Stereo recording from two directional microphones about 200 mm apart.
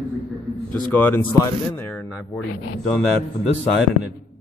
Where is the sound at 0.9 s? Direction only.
10° left (ahead or behind).